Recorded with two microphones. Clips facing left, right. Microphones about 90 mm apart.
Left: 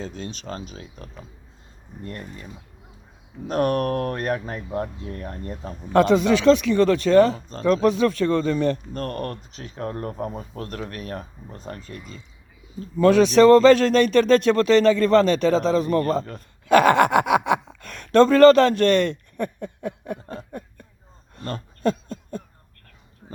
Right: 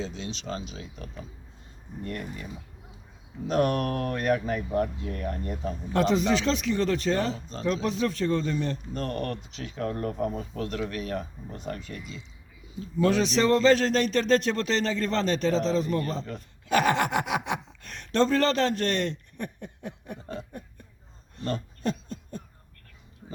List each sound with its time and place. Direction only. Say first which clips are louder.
0.0 s speech: left 1 dB; 50° left (ahead or behind)
3.4 s speech: left 3 dB; 45° left (ahead or behind)
5.9 s speech: left 7 dB; 60° left (ahead or behind); by 12.2 s 40° left (ahead or behind)
13.0 s speech: left 9 dB; 55° left (ahead or behind)
16.6 s speech: left 8 dB; 65° left (ahead or behind)
20.5 s a sound: left 6 dB; 65° left (ahead or behind)
21.3 s a sound: right 1 dB; 50° left (ahead or behind)